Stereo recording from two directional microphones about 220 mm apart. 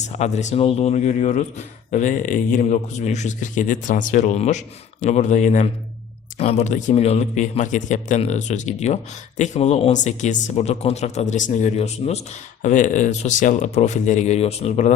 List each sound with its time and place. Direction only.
0.0 s speech: 30° left (ahead or behind)